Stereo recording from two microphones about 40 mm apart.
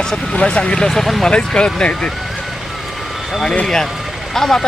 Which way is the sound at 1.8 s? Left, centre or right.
Left.